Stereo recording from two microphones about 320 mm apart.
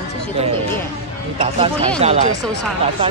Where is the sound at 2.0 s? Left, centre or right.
Centre.